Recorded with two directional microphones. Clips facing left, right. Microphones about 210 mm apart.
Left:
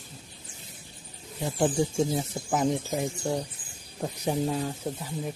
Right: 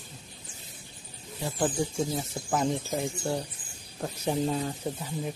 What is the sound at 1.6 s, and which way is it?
Speech, 25° left (ahead or behind).